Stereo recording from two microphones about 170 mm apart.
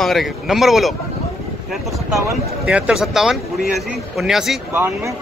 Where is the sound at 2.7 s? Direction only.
5° right (ahead or behind).